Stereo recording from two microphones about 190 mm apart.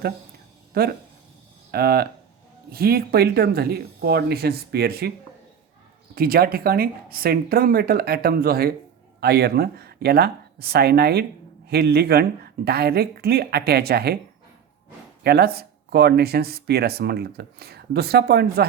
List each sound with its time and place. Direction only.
0.7 s speech: 55° right (ahead or behind)
6.1 s speech: 50° right (ahead or behind)
15.2 s speech: 55° right (ahead or behind)